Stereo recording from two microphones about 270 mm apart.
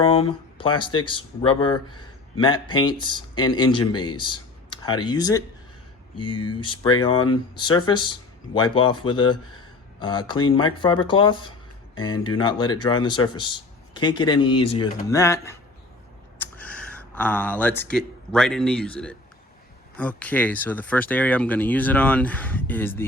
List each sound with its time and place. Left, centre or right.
0.0 s speech: centre
6.6 s speech: centre